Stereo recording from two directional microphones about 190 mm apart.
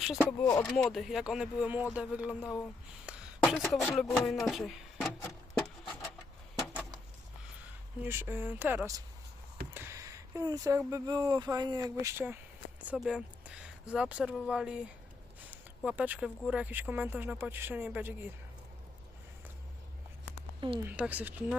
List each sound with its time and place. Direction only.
0.0 s speech: 5° right (ahead or behind)
8.0 s speech: 10° right (ahead or behind)
15.4 s a sound: 5° right (ahead or behind)
16.4 s speech: 5° right (ahead or behind)
20.6 s speech: 25° right (ahead or behind)
20.8 s speech: 5° right (ahead or behind)